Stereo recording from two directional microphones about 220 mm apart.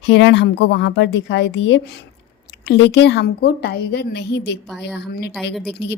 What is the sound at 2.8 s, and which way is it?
Speech, 50° left (ahead or behind).